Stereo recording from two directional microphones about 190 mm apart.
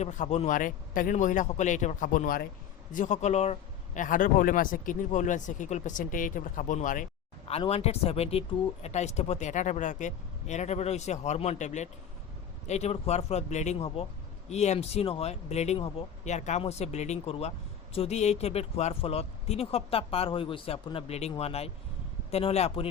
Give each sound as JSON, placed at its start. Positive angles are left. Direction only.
{"t": 0.0, "sound": "speech", "side_deg": 40}
{"t": 7.4, "sound": "speech", "side_deg": 30}